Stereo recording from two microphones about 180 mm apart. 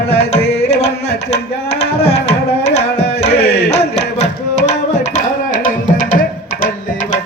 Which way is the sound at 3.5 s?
35° left (ahead or behind).